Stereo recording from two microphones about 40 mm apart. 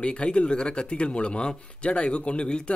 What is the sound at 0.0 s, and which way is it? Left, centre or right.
Speech, left.